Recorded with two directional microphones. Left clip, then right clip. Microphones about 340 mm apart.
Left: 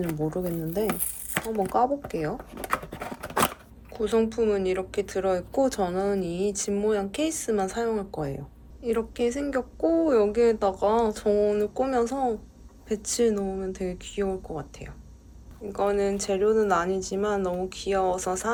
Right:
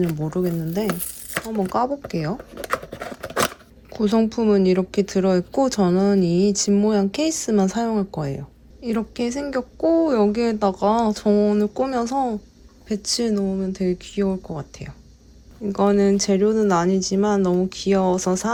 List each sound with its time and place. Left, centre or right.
0.3 s speech: centre
0.9 s speech: centre
2.0 s speech: centre
2.4 s a sound: centre
4.0 s speech: centre